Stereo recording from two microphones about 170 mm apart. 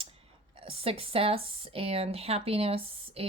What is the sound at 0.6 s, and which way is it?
A woman's voice, 35° right (ahead or behind).